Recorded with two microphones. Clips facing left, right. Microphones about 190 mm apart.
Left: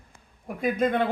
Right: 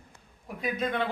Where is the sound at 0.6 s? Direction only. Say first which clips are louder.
Left 6 dB; 50° left (ahead or behind).